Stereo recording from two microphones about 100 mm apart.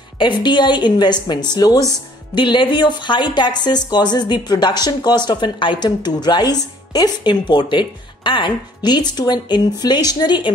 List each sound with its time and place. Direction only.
0.2 s speech: 50° left (ahead or behind)
2.3 s speech: 50° left (ahead or behind)